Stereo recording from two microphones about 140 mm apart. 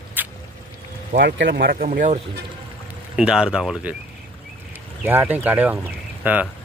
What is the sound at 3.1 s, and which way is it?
Speech, 5° right (ahead or behind).